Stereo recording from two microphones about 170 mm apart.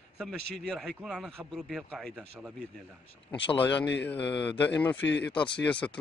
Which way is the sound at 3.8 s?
90° left.